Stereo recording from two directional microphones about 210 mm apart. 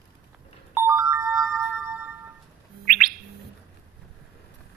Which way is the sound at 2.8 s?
40° right (ahead or behind).